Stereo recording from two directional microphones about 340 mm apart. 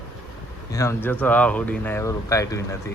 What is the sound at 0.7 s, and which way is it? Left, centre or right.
Speech, centre.